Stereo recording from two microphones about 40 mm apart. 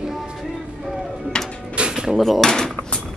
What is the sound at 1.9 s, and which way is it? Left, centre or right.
Dishes, centre.